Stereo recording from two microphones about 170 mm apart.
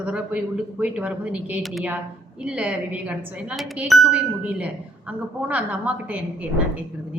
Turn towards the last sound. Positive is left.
turn(degrees=-10)  # may be behind; listen again after turning